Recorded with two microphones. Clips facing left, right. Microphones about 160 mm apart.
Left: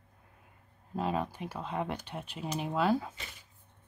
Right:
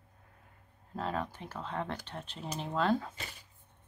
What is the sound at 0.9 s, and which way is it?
Speech, 15° left (ahead or behind).